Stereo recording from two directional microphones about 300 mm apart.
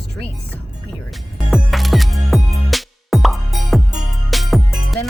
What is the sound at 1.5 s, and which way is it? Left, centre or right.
Music, centre.